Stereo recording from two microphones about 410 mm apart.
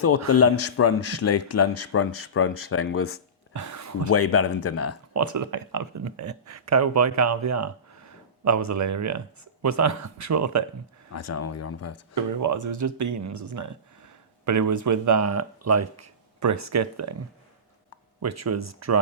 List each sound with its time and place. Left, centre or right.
0.3 s speech: left
3.5 s a sound: right
4.1 s speech: left
5.1 s speech: right
11.1 s speech: left
12.1 s speech: right
18.2 s speech: right